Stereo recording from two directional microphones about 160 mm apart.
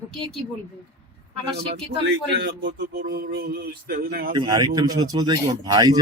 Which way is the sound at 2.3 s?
90° right.